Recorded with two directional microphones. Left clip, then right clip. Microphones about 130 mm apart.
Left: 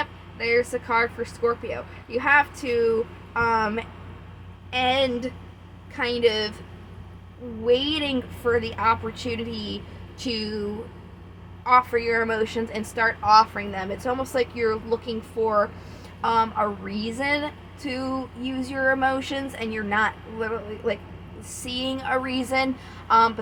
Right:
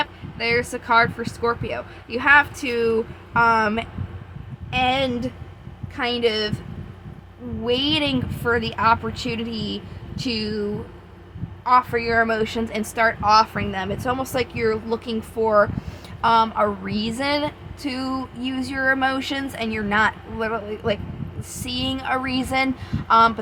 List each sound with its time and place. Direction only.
0.0 s a woman's voice: 40° right (ahead or behind)
4.7 s a woman's voice: 30° right (ahead or behind)
7.6 s a woman's voice: 40° right (ahead or behind)